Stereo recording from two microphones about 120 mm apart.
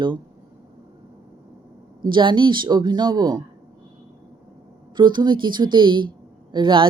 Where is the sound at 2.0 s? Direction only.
40° right (ahead or behind).